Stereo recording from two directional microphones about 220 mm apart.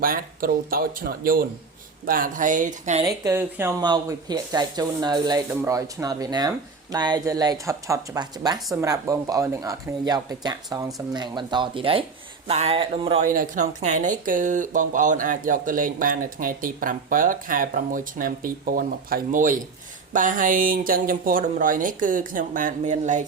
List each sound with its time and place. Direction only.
0.0 s speech: 40° right (ahead or behind)
3.0 s speech: 15° right (ahead or behind)
13.2 s speech: 40° right (ahead or behind)